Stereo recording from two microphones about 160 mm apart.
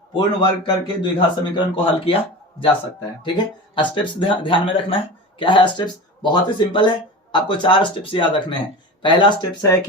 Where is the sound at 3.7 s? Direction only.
30° left (ahead or behind).